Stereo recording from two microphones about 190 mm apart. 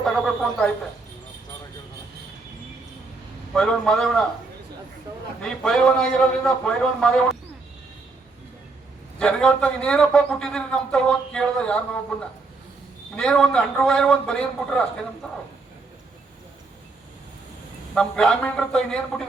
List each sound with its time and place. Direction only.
0.0 s a man's voice: 5° left (ahead or behind)
3.5 s a man's voice: 5° left (ahead or behind)
5.4 s a man's voice: 5° left (ahead or behind)
9.1 s a man's voice: 5° left (ahead or behind)
13.1 s a man's voice: 5° left (ahead or behind)
17.9 s a man's voice: 5° left (ahead or behind)